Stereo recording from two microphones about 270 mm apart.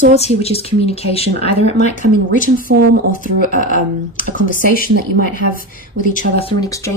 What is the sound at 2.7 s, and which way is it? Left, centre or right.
Speech, right.